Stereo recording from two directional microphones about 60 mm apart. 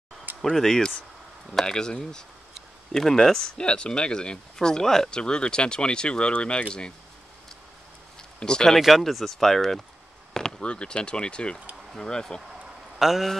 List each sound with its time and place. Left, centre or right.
0.4 s speech: centre
8.4 s speech: centre
8.7 s speech: centre
13.0 s speech: centre